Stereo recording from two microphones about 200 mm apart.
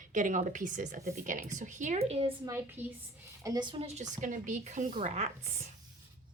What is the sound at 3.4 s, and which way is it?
A woman's voice, 20° right (ahead or behind).